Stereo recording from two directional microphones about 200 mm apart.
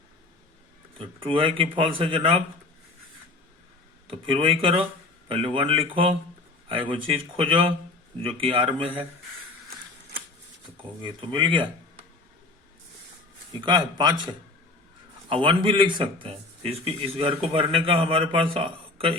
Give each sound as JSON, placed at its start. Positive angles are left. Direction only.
{"t": 0.9, "sound": "speech", "side_deg": -25}
{"t": 4.0, "sound": "speech", "side_deg": -25}
{"t": 11.0, "sound": "speech", "side_deg": -25}
{"t": 13.6, "sound": "speech", "side_deg": -25}